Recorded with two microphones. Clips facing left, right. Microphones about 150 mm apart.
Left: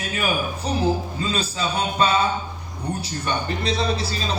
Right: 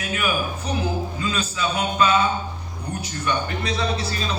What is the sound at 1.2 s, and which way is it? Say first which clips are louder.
Speech: even; 35° left (ahead or behind).